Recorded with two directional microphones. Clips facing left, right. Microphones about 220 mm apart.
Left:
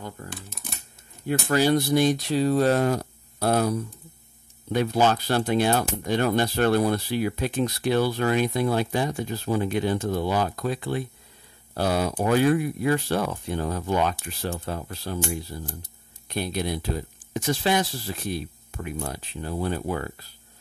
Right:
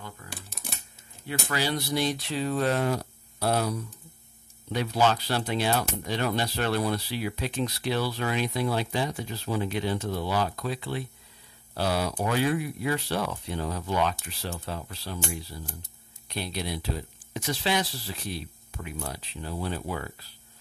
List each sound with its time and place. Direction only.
1.2 s speech: 45° left (ahead or behind)
4.7 s speech: 50° left (ahead or behind)